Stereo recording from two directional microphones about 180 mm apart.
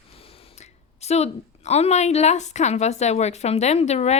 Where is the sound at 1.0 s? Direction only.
35° left (ahead or behind).